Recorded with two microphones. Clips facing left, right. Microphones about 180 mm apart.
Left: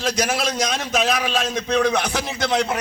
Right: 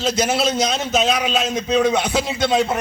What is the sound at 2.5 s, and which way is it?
Speech, 20° right (ahead or behind).